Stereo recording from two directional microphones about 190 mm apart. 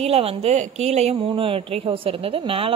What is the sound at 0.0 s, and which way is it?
A woman's voice, 30° right (ahead or behind).